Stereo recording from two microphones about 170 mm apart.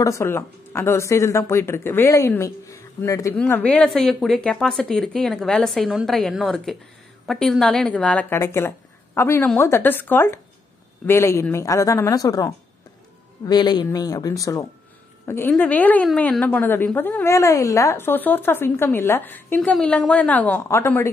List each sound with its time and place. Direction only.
0.0 s a woman's voice: 15° left (ahead or behind)